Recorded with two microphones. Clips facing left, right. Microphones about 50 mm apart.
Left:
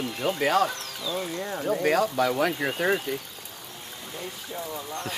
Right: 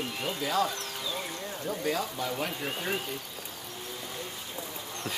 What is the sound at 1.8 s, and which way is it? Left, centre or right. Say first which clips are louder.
Speech: left 8 dB; left.